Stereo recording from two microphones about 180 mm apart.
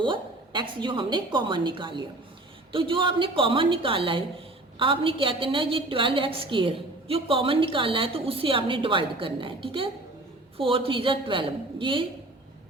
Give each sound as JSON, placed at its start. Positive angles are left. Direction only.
{"t": 0.0, "sound": "a woman's voice", "side_deg": -25}